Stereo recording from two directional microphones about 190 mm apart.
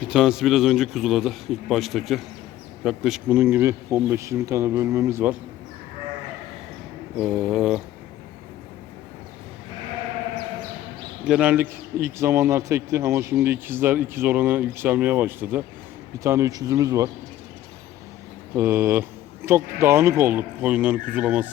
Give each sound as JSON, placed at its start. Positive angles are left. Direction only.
{"t": 0.0, "sound": "speech", "side_deg": -5}
{"t": 7.2, "sound": "speech", "side_deg": 0}
{"t": 11.3, "sound": "speech", "side_deg": -5}
{"t": 18.5, "sound": "speech", "side_deg": -10}